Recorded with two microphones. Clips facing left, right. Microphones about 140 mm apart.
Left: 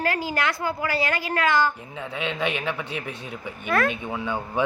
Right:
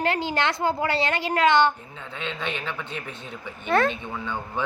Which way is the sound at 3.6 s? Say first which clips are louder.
Right 2 dB; 25° right (ahead or behind).